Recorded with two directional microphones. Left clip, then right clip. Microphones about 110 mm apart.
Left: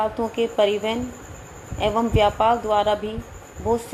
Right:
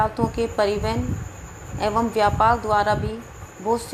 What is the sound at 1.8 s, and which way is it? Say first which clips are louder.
Speech: left 1 dB; 30° right (ahead or behind).